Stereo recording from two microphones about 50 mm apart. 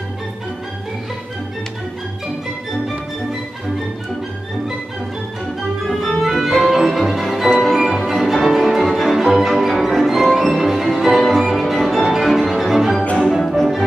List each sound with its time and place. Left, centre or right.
5.9 s music: centre
13.0 s music: left
13.5 s music: centre